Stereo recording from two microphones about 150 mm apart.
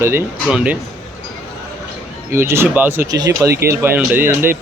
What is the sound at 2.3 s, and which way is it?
Speech, 15° right (ahead or behind).